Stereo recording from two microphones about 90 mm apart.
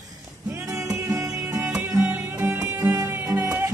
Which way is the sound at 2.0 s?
20° right (ahead or behind).